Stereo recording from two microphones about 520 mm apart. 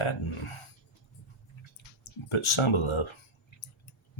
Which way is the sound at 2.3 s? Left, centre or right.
Left.